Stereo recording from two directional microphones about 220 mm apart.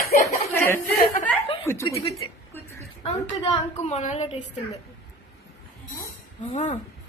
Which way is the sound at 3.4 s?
25° left (ahead or behind).